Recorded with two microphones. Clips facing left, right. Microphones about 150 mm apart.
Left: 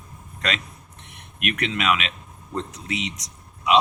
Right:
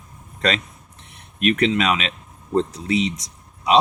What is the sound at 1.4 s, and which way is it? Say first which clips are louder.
Speech: right 8 dB; 30° right (ahead or behind).